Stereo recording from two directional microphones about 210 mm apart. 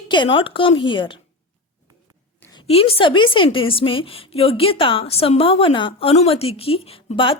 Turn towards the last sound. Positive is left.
turn(degrees=25)  # may be behind; listen again after turning